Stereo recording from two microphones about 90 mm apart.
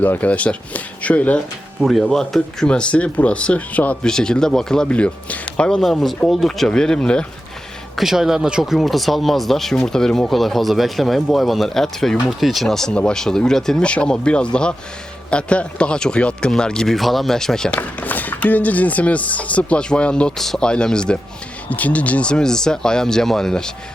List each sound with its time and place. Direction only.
0.0 s speech: 20° left (ahead or behind)
1.8 s speech: 5° left (ahead or behind)
7.9 s speech: 5° right (ahead or behind)
17.7 s speech: 20° left (ahead or behind)